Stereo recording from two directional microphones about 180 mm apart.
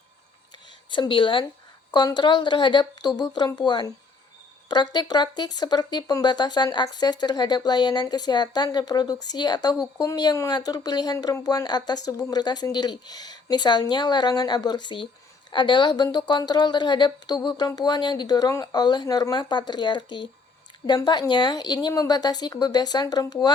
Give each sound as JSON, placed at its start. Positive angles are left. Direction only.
{"t": 0.9, "sound": "speech", "side_deg": 25}